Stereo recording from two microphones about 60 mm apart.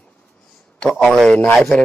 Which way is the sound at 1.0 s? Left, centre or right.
Centre.